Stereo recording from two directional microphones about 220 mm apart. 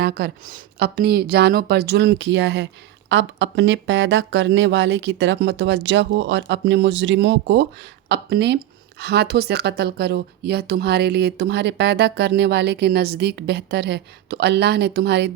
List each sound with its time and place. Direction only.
0.0 s speech: 45° right (ahead or behind)